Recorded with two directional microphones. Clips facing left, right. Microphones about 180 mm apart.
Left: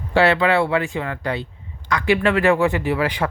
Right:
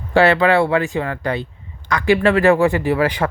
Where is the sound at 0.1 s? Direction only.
50° right (ahead or behind).